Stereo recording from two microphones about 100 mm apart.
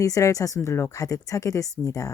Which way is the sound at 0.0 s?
35° left (ahead or behind).